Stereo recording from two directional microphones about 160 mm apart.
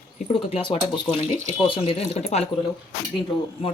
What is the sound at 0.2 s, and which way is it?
Speech, 35° left (ahead or behind).